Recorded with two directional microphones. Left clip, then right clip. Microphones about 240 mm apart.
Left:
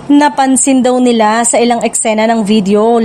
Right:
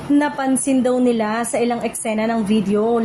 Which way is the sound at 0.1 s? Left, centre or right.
Left.